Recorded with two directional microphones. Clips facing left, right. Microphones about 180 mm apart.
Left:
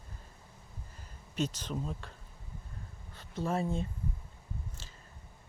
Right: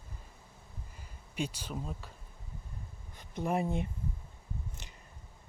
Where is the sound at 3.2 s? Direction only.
15° right (ahead or behind).